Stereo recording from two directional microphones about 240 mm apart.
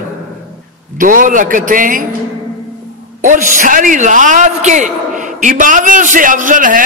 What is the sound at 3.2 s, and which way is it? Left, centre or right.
A man's voice, right.